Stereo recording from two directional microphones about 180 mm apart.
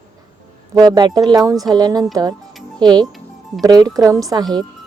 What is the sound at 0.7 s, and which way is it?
Speech, 20° right (ahead or behind).